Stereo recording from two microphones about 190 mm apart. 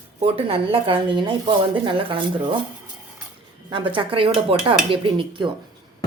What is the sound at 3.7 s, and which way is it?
Speech, 25° right (ahead or behind).